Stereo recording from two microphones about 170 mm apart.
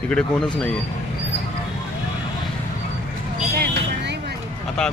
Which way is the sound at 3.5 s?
60° right (ahead or behind).